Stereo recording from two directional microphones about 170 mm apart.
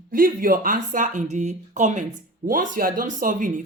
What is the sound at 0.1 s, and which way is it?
Speech, 55° right (ahead or behind).